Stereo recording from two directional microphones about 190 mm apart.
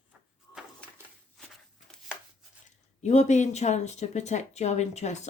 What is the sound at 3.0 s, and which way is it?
Speech, 40° left (ahead or behind).